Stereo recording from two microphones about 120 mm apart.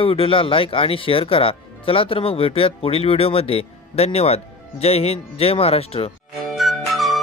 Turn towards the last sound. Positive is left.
turn(degrees=0)  # may be behind; listen again after turning